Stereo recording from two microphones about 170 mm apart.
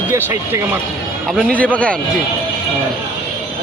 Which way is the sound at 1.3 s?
5° left (ahead or behind).